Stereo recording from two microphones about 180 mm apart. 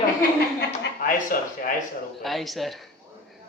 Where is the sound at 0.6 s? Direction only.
50° left (ahead or behind).